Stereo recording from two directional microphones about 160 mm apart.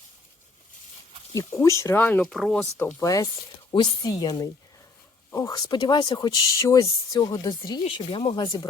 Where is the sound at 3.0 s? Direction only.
20° left (ahead or behind).